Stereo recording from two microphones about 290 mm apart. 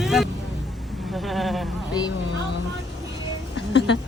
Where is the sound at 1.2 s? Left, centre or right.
Centre.